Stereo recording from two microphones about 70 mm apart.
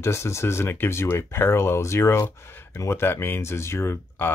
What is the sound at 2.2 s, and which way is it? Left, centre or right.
Speech, left.